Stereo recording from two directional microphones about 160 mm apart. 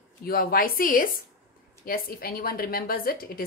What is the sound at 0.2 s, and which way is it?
A woman's voice, 70° left (ahead or behind).